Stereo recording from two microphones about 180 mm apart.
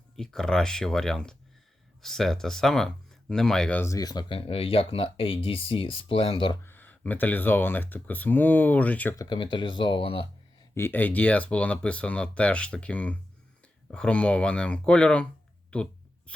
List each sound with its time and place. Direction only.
0.2 s speech: 5° left (ahead or behind); by 6.6 s 25° left (ahead or behind)
6.6 s speech: 10° left (ahead or behind)
9.1 s speech: 25° left (ahead or behind)
10.8 s speech: 10° left (ahead or behind)
15.7 s a sound: 5° left (ahead or behind)